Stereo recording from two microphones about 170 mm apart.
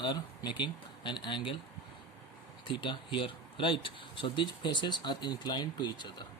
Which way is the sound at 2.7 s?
30° left (ahead or behind).